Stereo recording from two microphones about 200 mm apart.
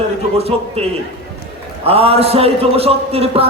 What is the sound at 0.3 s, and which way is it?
A man's voice, 30° right (ahead or behind).